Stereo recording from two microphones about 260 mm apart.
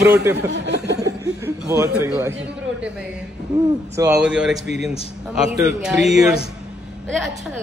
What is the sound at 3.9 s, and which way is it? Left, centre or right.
Speech, centre.